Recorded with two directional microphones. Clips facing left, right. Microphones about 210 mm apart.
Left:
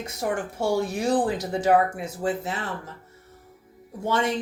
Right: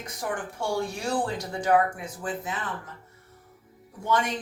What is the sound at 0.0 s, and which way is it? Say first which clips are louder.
Speech: left 5 dB; 25° left (ahead or behind).